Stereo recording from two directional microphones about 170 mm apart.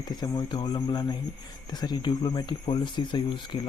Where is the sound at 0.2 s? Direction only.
25° left (ahead or behind).